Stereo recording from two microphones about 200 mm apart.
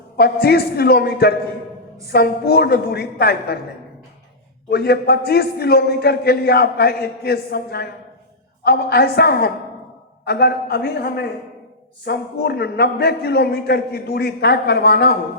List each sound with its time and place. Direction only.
0.2 s a man's voice: 50° left (ahead or behind)
4.7 s a man's voice: 50° left (ahead or behind)